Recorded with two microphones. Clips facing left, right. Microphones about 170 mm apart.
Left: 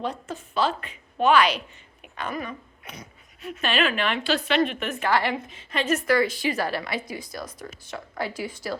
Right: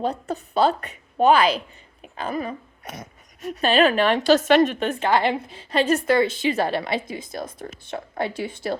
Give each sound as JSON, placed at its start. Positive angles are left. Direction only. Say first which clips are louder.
{"t": 0.0, "sound": "speech", "louder": "right 5 dB", "side_deg": -35}
{"t": 2.1, "sound": "a sound", "louder": "right 4 dB", "side_deg": -35}
{"t": 3.0, "sound": "speech", "louder": "right 5 dB", "side_deg": -40}